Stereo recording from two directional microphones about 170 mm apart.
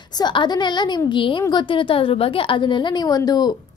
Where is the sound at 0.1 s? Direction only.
25° left (ahead or behind).